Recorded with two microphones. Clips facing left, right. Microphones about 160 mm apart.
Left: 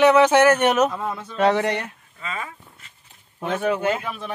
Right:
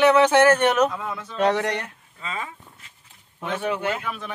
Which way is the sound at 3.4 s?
45° left (ahead or behind).